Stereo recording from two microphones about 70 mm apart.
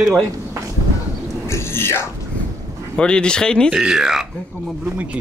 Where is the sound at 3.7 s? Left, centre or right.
Centre.